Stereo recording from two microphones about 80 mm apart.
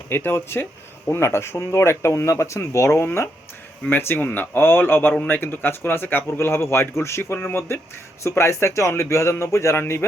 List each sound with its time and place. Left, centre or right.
0.1 s speech: left